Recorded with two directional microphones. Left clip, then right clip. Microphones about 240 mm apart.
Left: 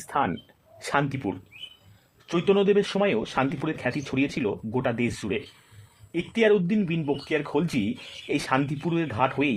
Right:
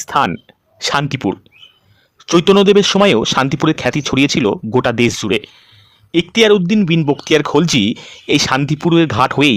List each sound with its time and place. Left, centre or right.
0.0 s speech: right